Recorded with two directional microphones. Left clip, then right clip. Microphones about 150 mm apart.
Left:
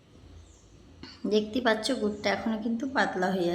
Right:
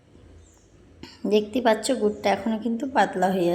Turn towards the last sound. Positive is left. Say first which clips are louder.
# right 6 dB
turn(degrees=-20)  # may be behind; listen again after turning